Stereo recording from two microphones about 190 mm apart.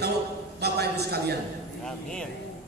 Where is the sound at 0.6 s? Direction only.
60° right (ahead or behind).